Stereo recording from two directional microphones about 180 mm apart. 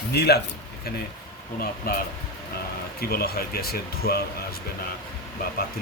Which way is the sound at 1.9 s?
55° left (ahead or behind).